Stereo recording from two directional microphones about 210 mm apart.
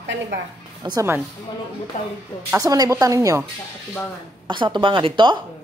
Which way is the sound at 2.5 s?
15° right (ahead or behind).